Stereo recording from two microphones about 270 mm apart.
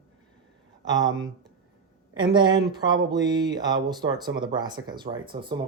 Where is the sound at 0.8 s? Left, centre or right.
Centre.